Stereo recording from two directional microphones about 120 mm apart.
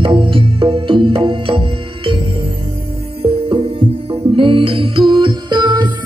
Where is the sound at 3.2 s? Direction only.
50° right (ahead or behind).